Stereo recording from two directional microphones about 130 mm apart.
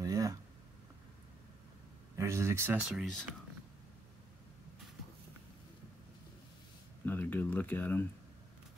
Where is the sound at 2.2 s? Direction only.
20° right (ahead or behind).